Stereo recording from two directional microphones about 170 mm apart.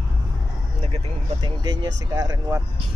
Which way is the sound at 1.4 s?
25° right (ahead or behind).